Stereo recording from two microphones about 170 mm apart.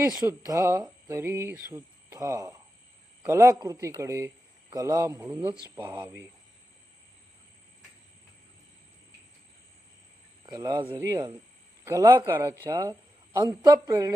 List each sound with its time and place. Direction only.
0.3 s a man's voice: 15° right (ahead or behind)
5.7 s a man's voice: 25° right (ahead or behind)
10.4 s a man's voice: 25° right (ahead or behind)